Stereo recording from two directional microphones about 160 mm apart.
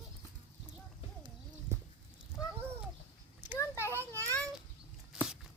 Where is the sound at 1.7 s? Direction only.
15° right (ahead or behind).